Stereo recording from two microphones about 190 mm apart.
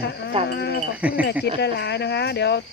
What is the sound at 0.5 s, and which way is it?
Speech, 60° left (ahead or behind).